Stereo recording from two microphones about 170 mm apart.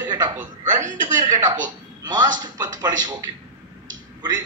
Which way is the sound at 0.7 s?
45° right (ahead or behind).